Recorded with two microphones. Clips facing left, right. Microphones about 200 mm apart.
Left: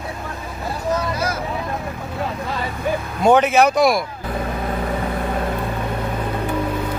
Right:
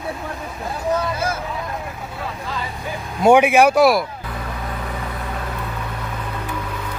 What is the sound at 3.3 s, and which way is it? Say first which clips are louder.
Speech: right 2 dB; 10° right (ahead or behind).